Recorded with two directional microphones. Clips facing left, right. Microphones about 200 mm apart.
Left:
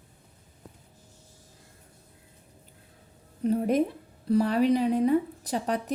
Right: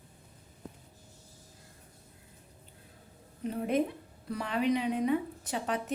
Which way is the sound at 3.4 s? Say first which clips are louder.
Left 6 dB; 40° left (ahead or behind).